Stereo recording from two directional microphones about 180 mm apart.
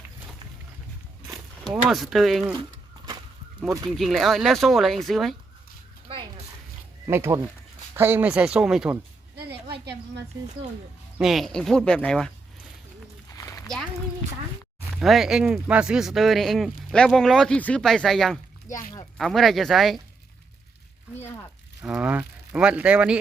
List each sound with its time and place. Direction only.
1.6 s speech: centre (ahead or behind)
3.9 s speech: centre (ahead or behind)
6.1 s a sound: 30° right (ahead or behind)
7.1 s speech: 15° right (ahead or behind)
9.3 s a sound: 65° right (ahead or behind)
11.2 s speech: centre (ahead or behind)
14.9 s speech: centre (ahead or behind)
21.8 s speech: 5° right (ahead or behind)